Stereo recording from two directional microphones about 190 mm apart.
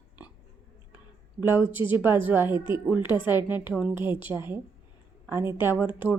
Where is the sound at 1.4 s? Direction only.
10° right (ahead or behind).